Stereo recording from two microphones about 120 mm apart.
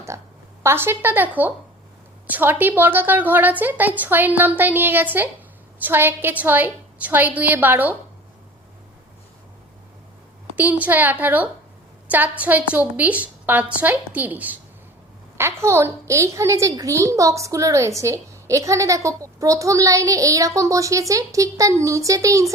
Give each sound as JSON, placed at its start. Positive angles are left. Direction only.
{"t": 0.6, "sound": "a woman's voice", "side_deg": -20}
{"t": 10.5, "sound": "a woman's voice", "side_deg": -15}